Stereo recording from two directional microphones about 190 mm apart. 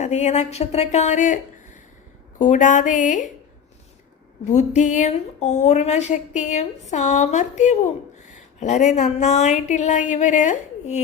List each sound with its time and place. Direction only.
0.0 s a woman's voice: 35° left (ahead or behind)
4.4 s a woman's voice: 40° left (ahead or behind)